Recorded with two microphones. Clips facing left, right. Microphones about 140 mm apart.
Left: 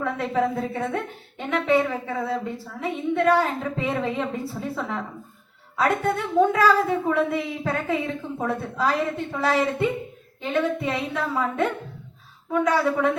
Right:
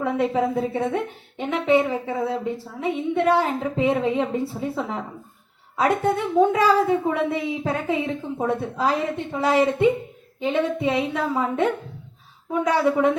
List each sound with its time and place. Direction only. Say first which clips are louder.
0.0 s a woman's voice: right 2 dB; 15° right (ahead or behind)